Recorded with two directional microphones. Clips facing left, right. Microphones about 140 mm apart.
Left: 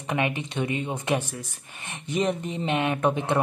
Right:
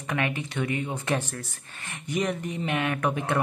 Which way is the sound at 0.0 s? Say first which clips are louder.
Left 2 dB; 20° left (ahead or behind).